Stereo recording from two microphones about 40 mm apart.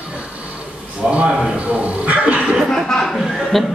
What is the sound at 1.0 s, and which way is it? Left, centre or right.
Speech, right.